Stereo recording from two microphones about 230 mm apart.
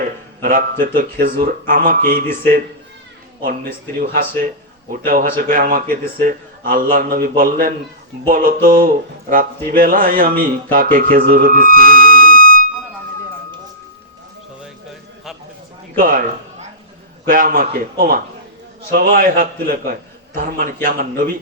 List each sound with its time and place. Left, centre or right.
0.4 s a man's voice: right
16.0 s a man's voice: right